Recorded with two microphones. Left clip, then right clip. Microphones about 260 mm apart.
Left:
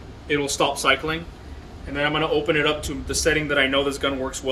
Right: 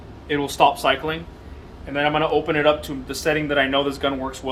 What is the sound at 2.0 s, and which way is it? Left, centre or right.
Speech, centre.